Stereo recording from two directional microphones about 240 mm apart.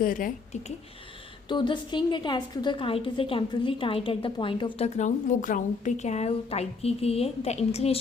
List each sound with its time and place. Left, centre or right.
0.0 s speech: left
1.5 s a woman's voice: centre